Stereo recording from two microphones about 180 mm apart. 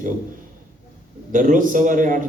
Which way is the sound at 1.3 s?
45° right (ahead or behind).